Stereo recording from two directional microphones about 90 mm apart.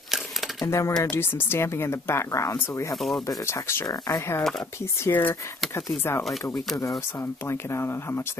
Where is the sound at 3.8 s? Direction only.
45° left (ahead or behind).